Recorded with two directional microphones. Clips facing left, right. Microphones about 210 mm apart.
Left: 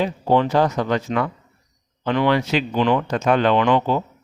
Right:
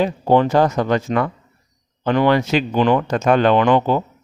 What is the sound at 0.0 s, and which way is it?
Speech, 45° right (ahead or behind).